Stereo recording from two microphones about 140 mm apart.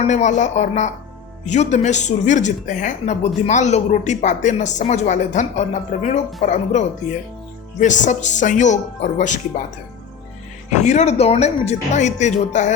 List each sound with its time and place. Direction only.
0.0 s speech: 55° left (ahead or behind)
10.7 s speech: 55° left (ahead or behind)